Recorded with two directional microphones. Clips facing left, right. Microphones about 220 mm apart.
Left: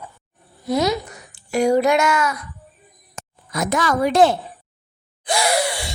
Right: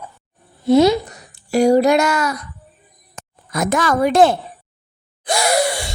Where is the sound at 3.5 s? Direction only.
50° right (ahead or behind).